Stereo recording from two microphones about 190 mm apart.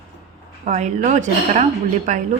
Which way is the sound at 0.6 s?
40° right (ahead or behind).